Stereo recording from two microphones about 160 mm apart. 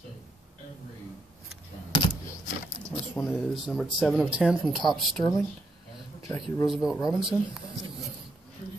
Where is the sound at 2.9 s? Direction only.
20° left (ahead or behind).